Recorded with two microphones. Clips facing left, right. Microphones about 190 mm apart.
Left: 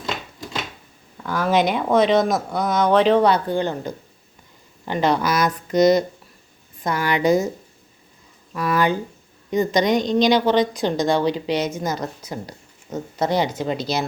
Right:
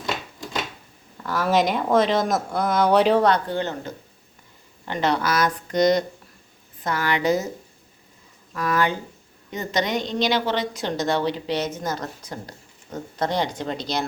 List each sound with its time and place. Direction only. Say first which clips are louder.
1.2 s speech: left 2 dB; centre (ahead or behind)
3.2 s a woman's voice: left 2 dB; 10° left (ahead or behind)
8.5 s a woman's voice: left 3 dB; 10° left (ahead or behind)